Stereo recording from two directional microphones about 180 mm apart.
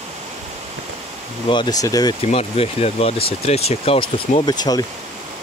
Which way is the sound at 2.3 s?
35° left (ahead or behind).